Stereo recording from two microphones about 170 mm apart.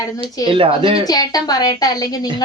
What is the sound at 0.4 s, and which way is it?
Speech, 30° right (ahead or behind).